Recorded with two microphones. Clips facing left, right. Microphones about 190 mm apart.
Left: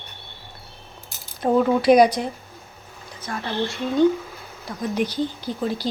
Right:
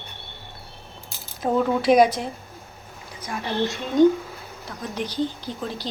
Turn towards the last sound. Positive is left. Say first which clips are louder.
# left 5 dB
turn(degrees=10)  # may be behind; listen again after turning